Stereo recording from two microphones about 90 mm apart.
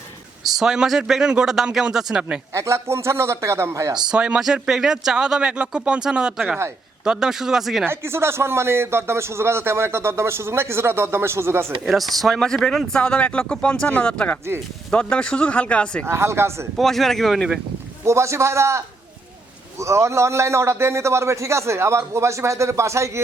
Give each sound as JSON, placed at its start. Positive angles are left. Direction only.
{"t": 0.4, "sound": "speech", "side_deg": -5}
{"t": 2.5, "sound": "a man's voice", "side_deg": -30}
{"t": 4.1, "sound": "speech", "side_deg": -10}
{"t": 7.9, "sound": "speech", "side_deg": -30}
{"t": 11.9, "sound": "speech", "side_deg": 0}
{"t": 16.0, "sound": "a man's voice", "side_deg": -30}
{"t": 16.7, "sound": "speech", "side_deg": 0}
{"t": 18.0, "sound": "a man's voice", "side_deg": -30}
{"t": 19.8, "sound": "a man's voice", "side_deg": -35}